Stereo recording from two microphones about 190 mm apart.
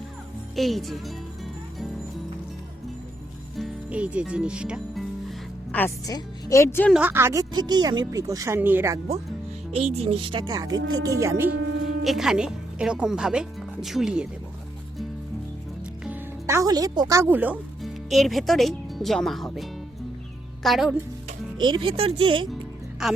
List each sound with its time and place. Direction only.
0.5 s music: centre (ahead or behind)
3.5 s speech: 5° right (ahead or behind)
5.7 s a woman's voice: 10° left (ahead or behind)
6.9 s speech: 10° right (ahead or behind)
9.8 s speech: 30° right (ahead or behind)
10.8 s speech: 90° right
11.0 s speech: 15° right (ahead or behind)
12.0 s speech: centre (ahead or behind)
16.0 s a woman's voice: 15° right (ahead or behind)
21.6 s speech: 25° right (ahead or behind)